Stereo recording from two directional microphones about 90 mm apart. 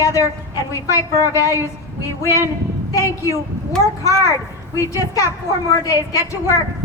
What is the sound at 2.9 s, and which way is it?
Speech, 35° left (ahead or behind).